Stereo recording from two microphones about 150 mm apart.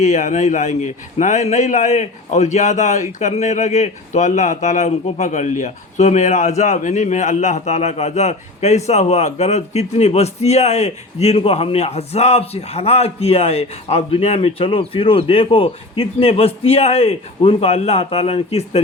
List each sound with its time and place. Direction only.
0.0 s a man's voice: 55° left (ahead or behind)